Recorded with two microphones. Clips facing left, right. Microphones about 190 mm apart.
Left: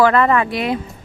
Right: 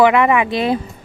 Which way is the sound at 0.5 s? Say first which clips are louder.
Right 3 dB; 30° right (ahead or behind).